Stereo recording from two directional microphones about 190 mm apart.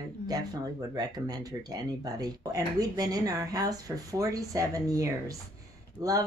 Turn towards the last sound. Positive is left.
turn(degrees=-15)  # may be behind; listen again after turning